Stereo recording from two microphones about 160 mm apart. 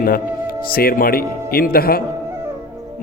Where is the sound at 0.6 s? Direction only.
65° left (ahead or behind).